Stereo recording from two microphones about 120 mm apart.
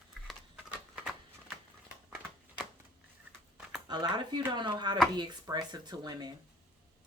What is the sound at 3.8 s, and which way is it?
Speech, 35° right (ahead or behind).